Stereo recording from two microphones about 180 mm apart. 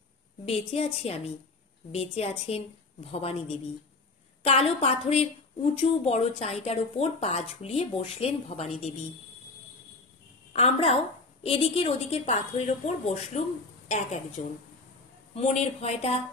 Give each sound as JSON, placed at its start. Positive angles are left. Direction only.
{"t": 0.5, "sound": "a woman's voice", "side_deg": 35}
{"t": 10.5, "sound": "a woman's voice", "side_deg": 35}